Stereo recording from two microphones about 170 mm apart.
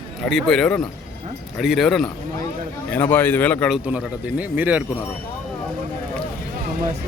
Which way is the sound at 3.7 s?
5° right (ahead or behind).